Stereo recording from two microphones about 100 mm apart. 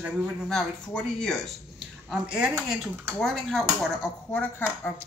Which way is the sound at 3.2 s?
5° left (ahead or behind).